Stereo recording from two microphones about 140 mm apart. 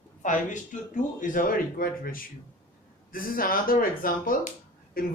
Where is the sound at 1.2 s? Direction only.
75° left (ahead or behind).